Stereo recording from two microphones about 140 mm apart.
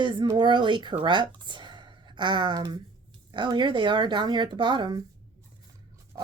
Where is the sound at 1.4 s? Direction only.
35° right (ahead or behind).